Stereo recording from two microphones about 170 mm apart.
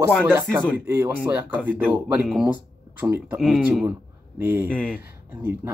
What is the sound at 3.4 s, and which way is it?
Speech, centre (ahead or behind).